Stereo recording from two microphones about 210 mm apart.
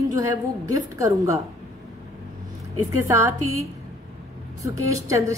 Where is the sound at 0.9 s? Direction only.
15° right (ahead or behind).